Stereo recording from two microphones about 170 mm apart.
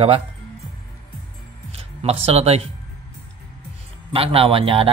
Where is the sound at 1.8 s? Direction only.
35° right (ahead or behind).